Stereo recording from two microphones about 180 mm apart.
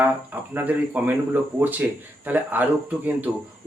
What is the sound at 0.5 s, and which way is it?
Speech, 10° right (ahead or behind).